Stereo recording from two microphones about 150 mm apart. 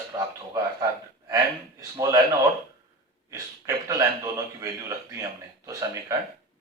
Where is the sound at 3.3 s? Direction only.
20° right (ahead or behind).